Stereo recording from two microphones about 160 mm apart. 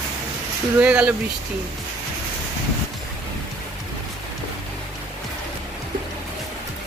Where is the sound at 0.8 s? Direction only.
10° right (ahead or behind).